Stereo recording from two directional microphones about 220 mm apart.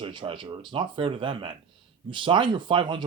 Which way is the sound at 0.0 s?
20° right (ahead or behind).